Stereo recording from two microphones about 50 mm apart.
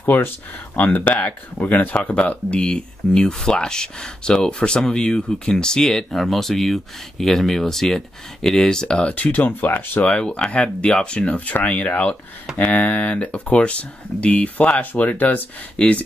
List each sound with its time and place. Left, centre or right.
0.0 s speech: left
2.2 s speech: left
9.1 s speech: left
10.0 s speech: left